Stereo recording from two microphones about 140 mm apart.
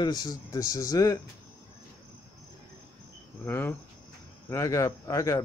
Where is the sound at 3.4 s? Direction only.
15° left (ahead or behind).